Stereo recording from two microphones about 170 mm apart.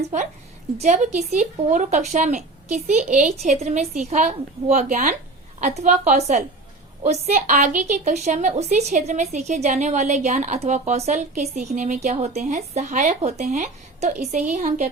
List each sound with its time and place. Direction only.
0.8 s a woman's voice: 45° right (ahead or behind)